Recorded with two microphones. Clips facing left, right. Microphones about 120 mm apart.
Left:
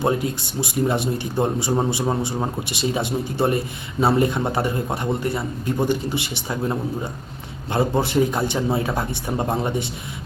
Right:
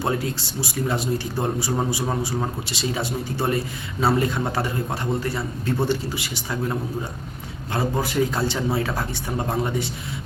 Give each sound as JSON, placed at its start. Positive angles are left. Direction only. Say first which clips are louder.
{"t": 0.0, "sound": "a man's voice", "louder": "left 3 dB", "side_deg": 20}